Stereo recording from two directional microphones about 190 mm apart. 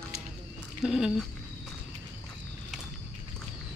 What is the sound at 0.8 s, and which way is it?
Speech, centre (ahead or behind).